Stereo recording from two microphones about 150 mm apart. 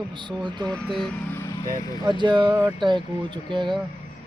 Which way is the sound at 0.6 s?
5° left (ahead or behind).